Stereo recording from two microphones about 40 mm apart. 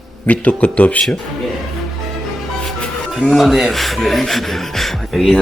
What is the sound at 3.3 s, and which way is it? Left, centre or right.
Speech, centre.